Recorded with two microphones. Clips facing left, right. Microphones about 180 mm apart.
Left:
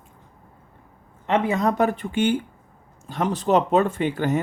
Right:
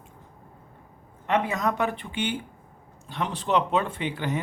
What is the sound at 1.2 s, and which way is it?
Speech, 25° left (ahead or behind).